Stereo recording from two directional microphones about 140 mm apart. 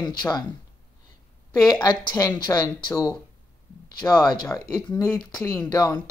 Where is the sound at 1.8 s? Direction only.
30° left (ahead or behind).